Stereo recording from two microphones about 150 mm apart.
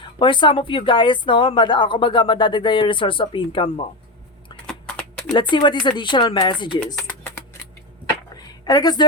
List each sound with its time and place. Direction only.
0.0 s speech: 35° left (ahead or behind)
4.6 s typing: 5° left (ahead or behind)
5.3 s speech: 30° left (ahead or behind)
6.7 s music: 10° left (ahead or behind)
8.4 s a sound: 25° left (ahead or behind)